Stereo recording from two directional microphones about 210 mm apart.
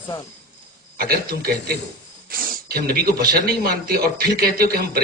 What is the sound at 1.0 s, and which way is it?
A man's voice, 45° right (ahead or behind).